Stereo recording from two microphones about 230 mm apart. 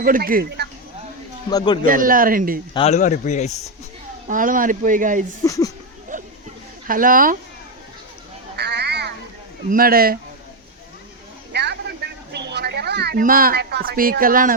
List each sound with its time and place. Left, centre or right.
0.0 s speech: right
1.5 s speech: centre
1.8 s speech: right
2.7 s speech: left
4.3 s speech: right
5.4 s speech: centre
6.1 s a sound: right
6.8 s speech: right
8.5 s a sound: right
9.6 s speech: right
11.5 s music: right